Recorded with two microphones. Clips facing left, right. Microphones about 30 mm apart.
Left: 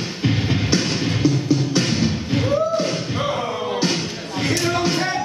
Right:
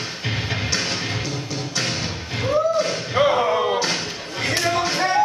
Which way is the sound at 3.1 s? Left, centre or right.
Right.